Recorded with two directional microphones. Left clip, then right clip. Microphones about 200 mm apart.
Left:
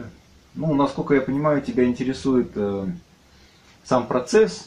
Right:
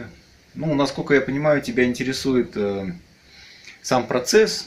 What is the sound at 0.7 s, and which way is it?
Speech, 20° right (ahead or behind).